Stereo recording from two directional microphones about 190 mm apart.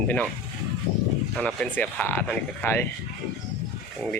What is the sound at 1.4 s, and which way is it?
Speech, 5° left (ahead or behind).